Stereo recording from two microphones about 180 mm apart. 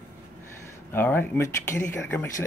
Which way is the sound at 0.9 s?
10° left (ahead or behind).